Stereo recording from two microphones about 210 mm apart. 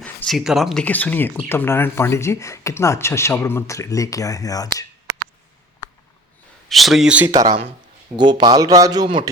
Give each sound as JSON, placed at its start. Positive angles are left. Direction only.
{"t": 0.0, "sound": "speech", "side_deg": 5}
{"t": 6.7, "sound": "a man's voice", "side_deg": 0}